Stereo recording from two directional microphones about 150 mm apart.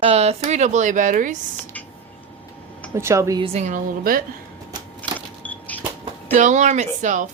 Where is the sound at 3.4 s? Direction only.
45° right (ahead or behind); by 4.2 s 70° right (ahead or behind).